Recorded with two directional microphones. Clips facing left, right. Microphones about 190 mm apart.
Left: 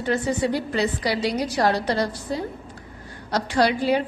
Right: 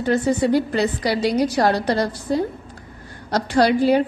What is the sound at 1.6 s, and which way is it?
A woman's voice, 45° right (ahead or behind).